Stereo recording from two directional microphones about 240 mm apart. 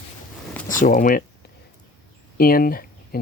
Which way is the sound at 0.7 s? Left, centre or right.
Left.